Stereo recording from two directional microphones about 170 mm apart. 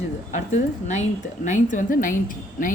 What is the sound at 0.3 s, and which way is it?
A woman's voice, 45° left (ahead or behind).